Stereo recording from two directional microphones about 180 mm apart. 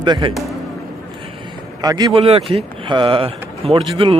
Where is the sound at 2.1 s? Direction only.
30° right (ahead or behind).